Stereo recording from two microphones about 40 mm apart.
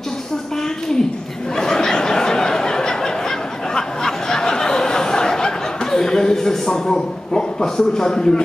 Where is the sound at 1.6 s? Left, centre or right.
Centre.